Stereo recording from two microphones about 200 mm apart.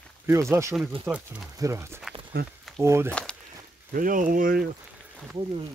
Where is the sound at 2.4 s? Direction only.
50° right (ahead or behind).